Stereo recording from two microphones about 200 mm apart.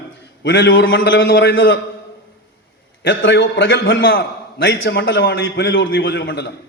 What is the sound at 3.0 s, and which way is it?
A man's voice, 55° left (ahead or behind).